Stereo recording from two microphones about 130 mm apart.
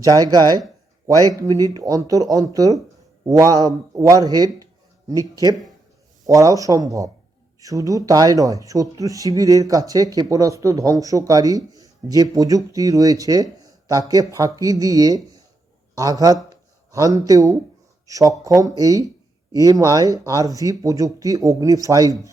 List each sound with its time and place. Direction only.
0.0 s speech: 30° right (ahead or behind)